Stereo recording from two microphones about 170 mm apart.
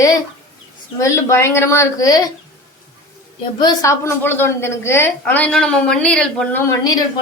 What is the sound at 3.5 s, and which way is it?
A woman's voice, 20° left (ahead or behind).